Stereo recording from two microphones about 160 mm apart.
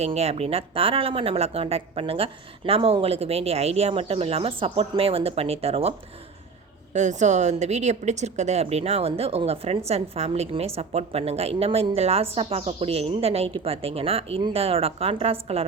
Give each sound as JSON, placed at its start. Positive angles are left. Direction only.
{"t": 0.0, "sound": "a woman's voice", "side_deg": -40}
{"t": 6.9, "sound": "a woman's voice", "side_deg": -50}